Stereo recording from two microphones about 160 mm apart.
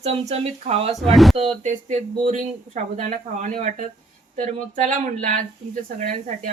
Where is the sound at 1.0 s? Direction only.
Centre (ahead or behind).